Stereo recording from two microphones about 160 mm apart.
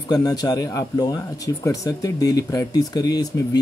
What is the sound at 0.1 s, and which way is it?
Speech, 25° left (ahead or behind).